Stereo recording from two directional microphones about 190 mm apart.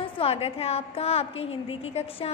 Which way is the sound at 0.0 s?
30° left (ahead or behind).